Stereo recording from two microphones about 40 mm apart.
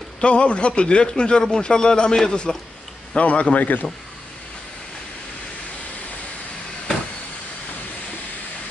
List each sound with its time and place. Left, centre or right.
0.2 s a man's voice: left